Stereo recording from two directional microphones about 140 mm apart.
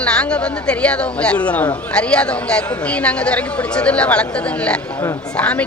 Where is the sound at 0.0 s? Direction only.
10° left (ahead or behind).